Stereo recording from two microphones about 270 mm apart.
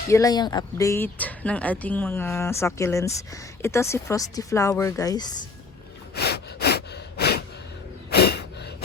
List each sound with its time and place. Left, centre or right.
0.1 s speech: centre
6.1 s gasp: left